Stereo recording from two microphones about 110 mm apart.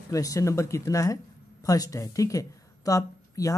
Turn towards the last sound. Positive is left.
turn(degrees=30)  # may be behind; listen again after turning